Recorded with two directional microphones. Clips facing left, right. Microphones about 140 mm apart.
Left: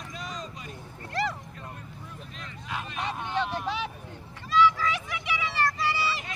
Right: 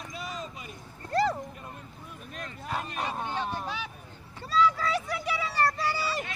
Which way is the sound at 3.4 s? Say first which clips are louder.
Left 3 dB; 80° left.